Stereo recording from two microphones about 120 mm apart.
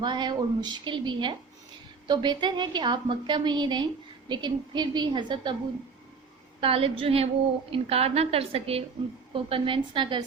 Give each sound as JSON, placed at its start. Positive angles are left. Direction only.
{"t": 0.0, "sound": "a woman's voice", "side_deg": -40}
{"t": 6.6, "sound": "a woman's voice", "side_deg": -50}